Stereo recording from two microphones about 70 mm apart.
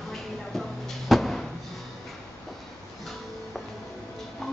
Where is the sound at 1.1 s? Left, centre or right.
Centre.